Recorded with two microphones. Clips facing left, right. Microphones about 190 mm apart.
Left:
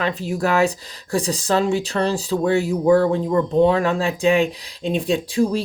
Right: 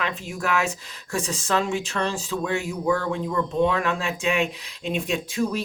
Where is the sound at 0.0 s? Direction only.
35° left (ahead or behind).